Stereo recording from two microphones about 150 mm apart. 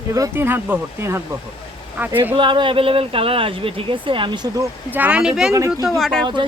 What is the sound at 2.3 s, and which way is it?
Speech, 35° right (ahead or behind).